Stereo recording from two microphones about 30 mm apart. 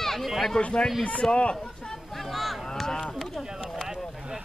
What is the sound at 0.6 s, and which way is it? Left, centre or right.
Speech, left.